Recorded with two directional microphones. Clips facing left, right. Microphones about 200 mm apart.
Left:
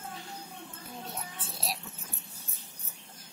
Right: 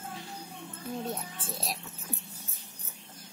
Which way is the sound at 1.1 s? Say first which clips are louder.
Right 5 dB; 50° right (ahead or behind).